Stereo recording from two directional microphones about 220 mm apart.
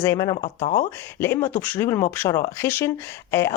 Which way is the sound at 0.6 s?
35° left (ahead or behind).